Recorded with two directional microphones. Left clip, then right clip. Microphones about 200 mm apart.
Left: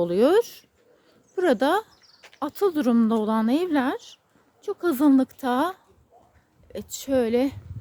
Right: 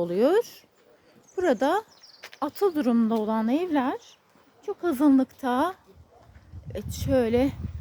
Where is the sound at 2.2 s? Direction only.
30° right (ahead or behind).